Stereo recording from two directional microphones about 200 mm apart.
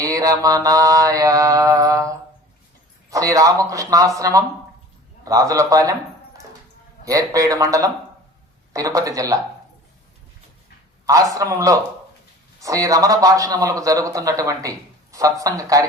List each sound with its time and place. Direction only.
0.0 s a man's voice: 15° right (ahead or behind)
11.0 s a man's voice: 15° right (ahead or behind)